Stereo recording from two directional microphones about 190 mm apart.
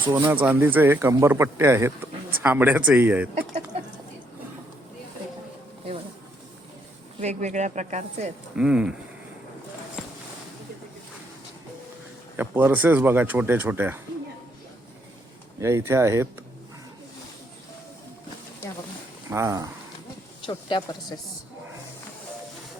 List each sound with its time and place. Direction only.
0.0 s speech: 25° right (ahead or behind)
0.3 s speech: 10° right (ahead or behind)
7.2 s speech: 35° right (ahead or behind)
8.5 s speech: 5° right (ahead or behind)
12.4 s speech: 10° right (ahead or behind)
15.6 s speech: 15° right (ahead or behind)
19.3 s speech: 15° right (ahead or behind)
20.5 s speech: 25° left (ahead or behind)